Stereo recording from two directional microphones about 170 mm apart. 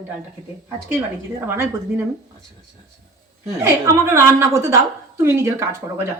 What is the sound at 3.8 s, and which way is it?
A woman's voice, 15° right (ahead or behind).